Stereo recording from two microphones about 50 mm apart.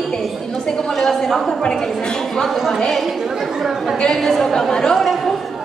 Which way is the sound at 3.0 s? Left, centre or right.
Centre.